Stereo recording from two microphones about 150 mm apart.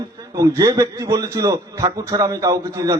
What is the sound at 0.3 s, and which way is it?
A man's voice, 25° right (ahead or behind).